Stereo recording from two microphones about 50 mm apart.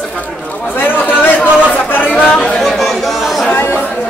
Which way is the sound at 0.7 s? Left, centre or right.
Left.